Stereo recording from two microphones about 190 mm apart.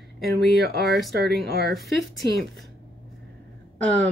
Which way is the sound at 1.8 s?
Centre (ahead or behind).